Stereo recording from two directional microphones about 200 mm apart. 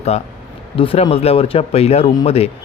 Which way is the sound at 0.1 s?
30° left (ahead or behind).